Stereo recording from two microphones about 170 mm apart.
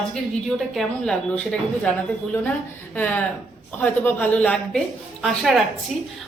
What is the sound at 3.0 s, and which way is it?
A woman's voice, 10° left (ahead or behind).